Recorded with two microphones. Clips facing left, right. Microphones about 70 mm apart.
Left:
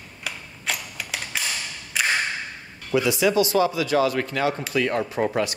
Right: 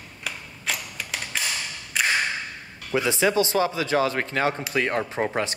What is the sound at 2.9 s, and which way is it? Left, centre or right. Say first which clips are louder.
Speech: left 2 dB; right.